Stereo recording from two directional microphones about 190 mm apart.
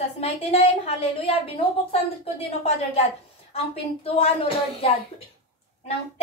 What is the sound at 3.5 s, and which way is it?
Speech, 30° left (ahead or behind).